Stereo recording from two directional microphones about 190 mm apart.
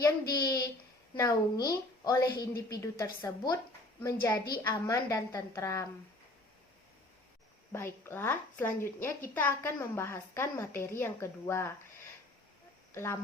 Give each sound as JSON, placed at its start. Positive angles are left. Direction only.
{"t": 0.0, "sound": "a woman's voice", "side_deg": 20}
{"t": 7.7, "sound": "a woman's voice", "side_deg": 10}
{"t": 12.9, "sound": "speech", "side_deg": 15}